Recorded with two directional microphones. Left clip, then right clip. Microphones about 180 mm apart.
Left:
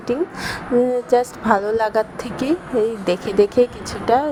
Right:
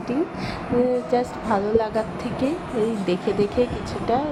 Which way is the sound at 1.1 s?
45° left (ahead or behind).